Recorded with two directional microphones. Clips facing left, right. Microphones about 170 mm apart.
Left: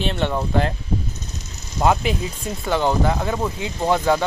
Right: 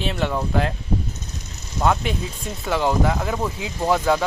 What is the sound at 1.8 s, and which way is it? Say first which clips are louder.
Speech: left 2 dB; 10° left (ahead or behind).